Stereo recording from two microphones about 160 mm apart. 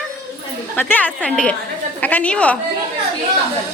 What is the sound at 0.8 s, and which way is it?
A woman's voice, 10° left (ahead or behind).